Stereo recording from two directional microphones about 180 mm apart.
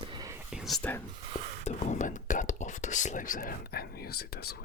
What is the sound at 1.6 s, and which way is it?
Speech, 40° left (ahead or behind).